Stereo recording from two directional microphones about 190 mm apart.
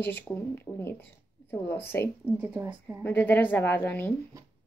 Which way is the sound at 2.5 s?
10° right (ahead or behind).